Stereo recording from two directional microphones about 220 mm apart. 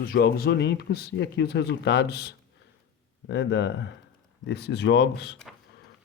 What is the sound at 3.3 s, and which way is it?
Speech, 55° left (ahead or behind).